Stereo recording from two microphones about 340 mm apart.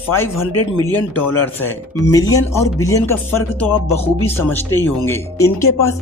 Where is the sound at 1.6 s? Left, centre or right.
Centre.